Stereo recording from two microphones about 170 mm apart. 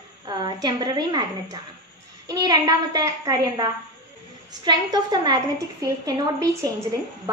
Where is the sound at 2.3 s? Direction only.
20° right (ahead or behind).